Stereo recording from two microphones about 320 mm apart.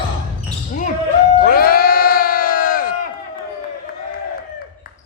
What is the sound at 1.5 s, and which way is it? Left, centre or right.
Crowd, left.